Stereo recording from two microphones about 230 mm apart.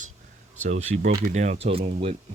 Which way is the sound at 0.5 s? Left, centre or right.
Right.